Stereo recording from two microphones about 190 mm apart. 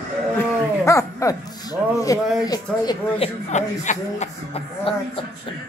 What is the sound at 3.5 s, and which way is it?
Speech, 40° left (ahead or behind).